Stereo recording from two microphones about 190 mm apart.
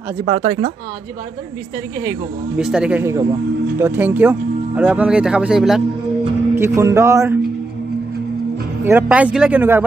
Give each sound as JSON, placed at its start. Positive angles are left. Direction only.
{"t": 0.2, "sound": "speech", "side_deg": -30}
{"t": 2.5, "sound": "speech", "side_deg": -5}
{"t": 6.5, "sound": "speech", "side_deg": -15}
{"t": 8.8, "sound": "speech", "side_deg": -10}